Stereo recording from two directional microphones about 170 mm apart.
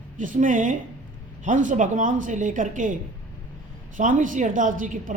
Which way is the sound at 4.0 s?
50° right (ahead or behind).